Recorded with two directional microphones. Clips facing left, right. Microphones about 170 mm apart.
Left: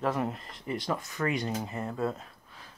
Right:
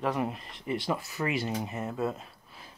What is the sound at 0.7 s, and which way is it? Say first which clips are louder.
Speech: right 1 dB; 15° right (ahead or behind).